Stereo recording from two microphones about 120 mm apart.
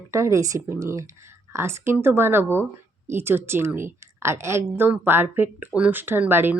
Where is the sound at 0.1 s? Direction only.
25° right (ahead or behind).